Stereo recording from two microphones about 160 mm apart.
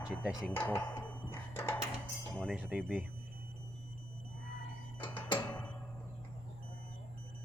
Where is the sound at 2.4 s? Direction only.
5° right (ahead or behind).